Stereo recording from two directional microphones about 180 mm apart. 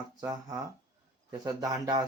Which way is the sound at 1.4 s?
20° right (ahead or behind).